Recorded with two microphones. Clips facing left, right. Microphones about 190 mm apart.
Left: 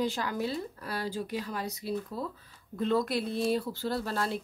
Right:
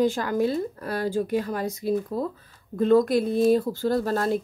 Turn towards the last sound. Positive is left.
turn(degrees=-45)  # may be behind; listen again after turning